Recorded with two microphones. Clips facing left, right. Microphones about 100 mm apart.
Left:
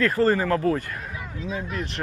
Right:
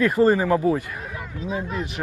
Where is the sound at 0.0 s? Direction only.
15° right (ahead or behind).